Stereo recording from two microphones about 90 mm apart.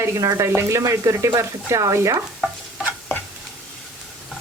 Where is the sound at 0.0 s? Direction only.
35° right (ahead or behind).